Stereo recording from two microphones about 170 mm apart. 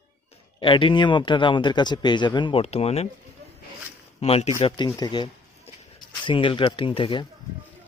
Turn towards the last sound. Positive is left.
turn(degrees=30)  # may be behind; listen again after turning